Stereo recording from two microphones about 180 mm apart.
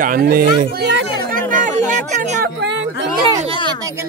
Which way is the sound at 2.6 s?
75° right (ahead or behind).